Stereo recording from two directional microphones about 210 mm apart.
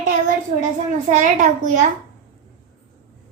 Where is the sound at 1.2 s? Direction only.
40° right (ahead or behind).